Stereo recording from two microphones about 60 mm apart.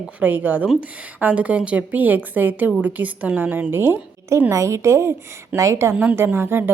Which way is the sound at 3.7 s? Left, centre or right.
Right.